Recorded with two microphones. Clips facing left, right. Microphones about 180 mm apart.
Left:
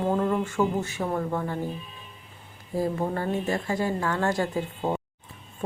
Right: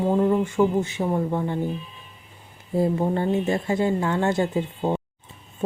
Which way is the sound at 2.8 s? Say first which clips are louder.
Right 5 dB; 20° right (ahead or behind).